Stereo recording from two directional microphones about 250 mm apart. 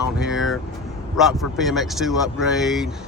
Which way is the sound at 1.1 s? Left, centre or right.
Centre.